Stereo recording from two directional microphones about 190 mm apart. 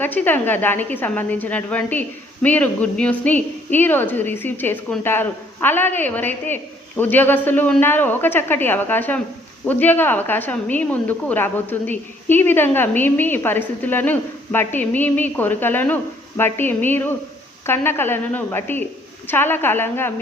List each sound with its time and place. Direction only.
0.0 s a woman's voice: 10° left (ahead or behind)